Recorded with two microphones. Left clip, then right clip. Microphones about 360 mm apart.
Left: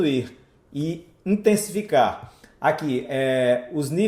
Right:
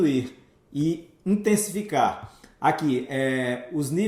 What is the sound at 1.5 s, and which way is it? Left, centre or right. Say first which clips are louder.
Speech: left 5 dB; left.